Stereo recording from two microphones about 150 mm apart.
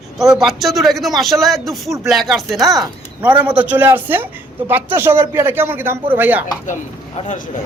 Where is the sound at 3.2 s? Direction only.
10° right (ahead or behind).